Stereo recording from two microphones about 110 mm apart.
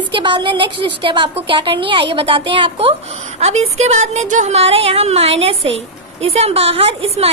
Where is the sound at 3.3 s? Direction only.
80° right.